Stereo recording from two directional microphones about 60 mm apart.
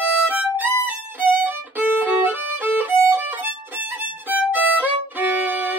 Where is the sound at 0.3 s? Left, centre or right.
Right.